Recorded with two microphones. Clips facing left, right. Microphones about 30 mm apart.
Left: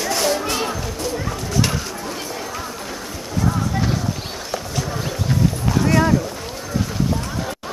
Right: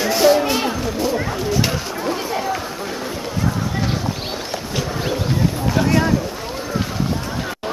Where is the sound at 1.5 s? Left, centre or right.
Centre.